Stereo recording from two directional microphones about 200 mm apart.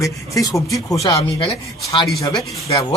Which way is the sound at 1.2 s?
30° left (ahead or behind).